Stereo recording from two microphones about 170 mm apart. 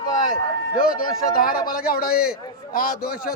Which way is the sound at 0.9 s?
55° left (ahead or behind).